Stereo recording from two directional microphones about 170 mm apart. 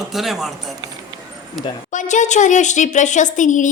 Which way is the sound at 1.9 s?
45° left (ahead or behind).